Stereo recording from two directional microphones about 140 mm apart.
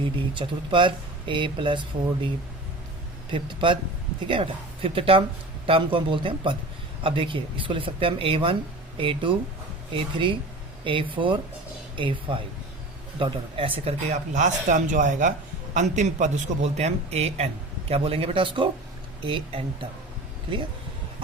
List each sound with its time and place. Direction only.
0.0 s speech: 35° right (ahead or behind)
3.3 s a man's voice: 35° right (ahead or behind)